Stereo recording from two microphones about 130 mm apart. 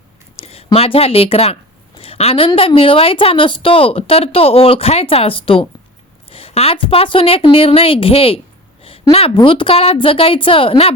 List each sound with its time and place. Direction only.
0.3 s speech: 50° left (ahead or behind)
2.0 s a sound: 50° left (ahead or behind)
2.6 s speech: 45° left (ahead or behind)